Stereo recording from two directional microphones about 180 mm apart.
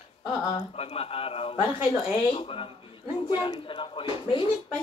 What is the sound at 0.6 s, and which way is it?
A woman's voice, 35° left (ahead or behind).